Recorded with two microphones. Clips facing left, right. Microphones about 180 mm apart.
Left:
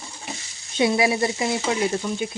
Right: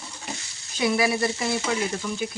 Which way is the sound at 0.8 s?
25° left (ahead or behind).